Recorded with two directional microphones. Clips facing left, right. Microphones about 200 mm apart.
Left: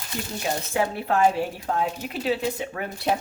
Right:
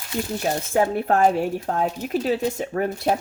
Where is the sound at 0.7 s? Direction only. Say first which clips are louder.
Right 4 dB; 50° right (ahead or behind).